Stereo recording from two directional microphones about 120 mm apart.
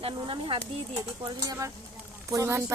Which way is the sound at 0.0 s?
45° right (ahead or behind).